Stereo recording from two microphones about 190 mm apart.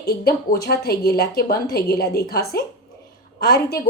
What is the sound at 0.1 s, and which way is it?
A woman's voice, 55° left (ahead or behind).